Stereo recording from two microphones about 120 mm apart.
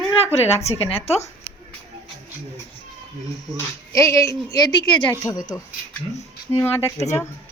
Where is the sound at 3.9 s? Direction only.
25° left (ahead or behind).